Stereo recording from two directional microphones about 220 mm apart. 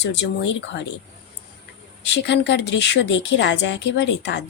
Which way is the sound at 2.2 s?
50° left (ahead or behind).